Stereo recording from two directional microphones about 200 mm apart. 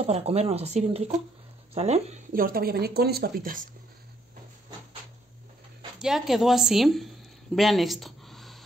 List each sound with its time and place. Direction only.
0.0 s speech: 30° right (ahead or behind); by 3.6 s 45° right (ahead or behind)
5.9 s a woman's voice: centre (ahead or behind)
7.5 s a sound: centre (ahead or behind)